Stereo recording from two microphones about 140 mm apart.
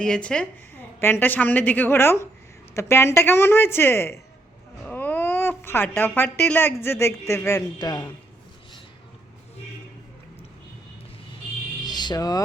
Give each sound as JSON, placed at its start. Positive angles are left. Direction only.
{"t": 0.0, "sound": "speech", "side_deg": 5}
{"t": 11.8, "sound": "music", "side_deg": 30}